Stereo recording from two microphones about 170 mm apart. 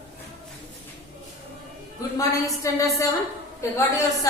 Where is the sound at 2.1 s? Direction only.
20° left (ahead or behind).